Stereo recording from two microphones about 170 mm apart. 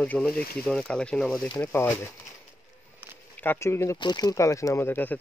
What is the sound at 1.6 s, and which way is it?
Speech, 15° left (ahead or behind).